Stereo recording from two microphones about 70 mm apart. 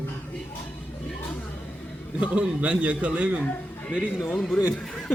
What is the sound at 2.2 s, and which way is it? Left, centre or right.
A man's voice, centre.